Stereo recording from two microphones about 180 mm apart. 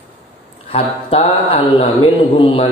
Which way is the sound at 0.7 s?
35° left (ahead or behind).